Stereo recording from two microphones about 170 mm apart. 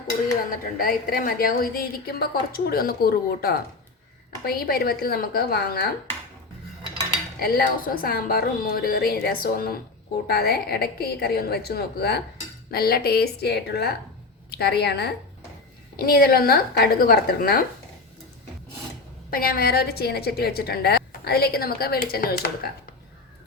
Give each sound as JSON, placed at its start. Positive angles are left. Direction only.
{"t": 0.8, "sound": "a woman's voice", "side_deg": 60}
{"t": 7.3, "sound": "a woman's voice", "side_deg": 65}
{"t": 19.3, "sound": "a woman's voice", "side_deg": 60}